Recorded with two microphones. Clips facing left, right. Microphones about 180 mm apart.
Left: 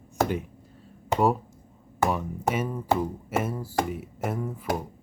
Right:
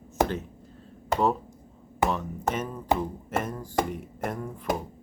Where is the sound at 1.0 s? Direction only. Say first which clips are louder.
Left 2 dB; 10° left (ahead or behind).